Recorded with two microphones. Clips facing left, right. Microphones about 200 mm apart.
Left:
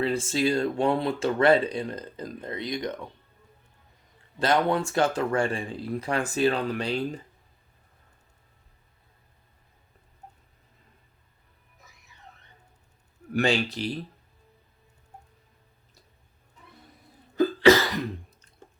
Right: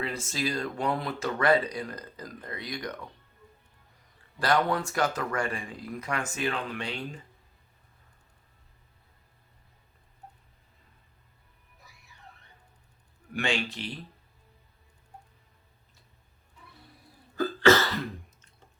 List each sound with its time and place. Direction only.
0.0 s speech: 30° left (ahead or behind)
4.4 s speech: 25° left (ahead or behind)
13.3 s speech: 40° left (ahead or behind)
17.3 s cough: 15° left (ahead or behind)